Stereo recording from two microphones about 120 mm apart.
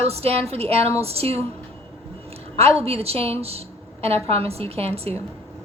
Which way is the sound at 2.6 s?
55° right (ahead or behind).